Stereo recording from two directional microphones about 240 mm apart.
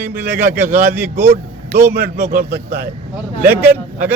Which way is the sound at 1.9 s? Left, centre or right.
Right.